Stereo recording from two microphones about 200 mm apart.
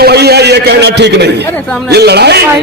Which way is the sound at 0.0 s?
55° right (ahead or behind).